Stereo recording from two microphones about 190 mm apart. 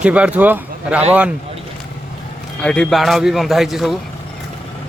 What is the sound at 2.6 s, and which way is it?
A man's voice, 5° left (ahead or behind).